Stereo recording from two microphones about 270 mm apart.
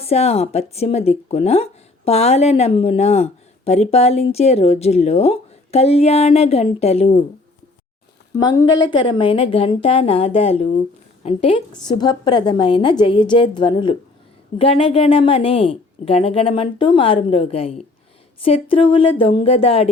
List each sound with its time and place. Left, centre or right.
0.0 s speech: left
8.4 s a woman's voice: centre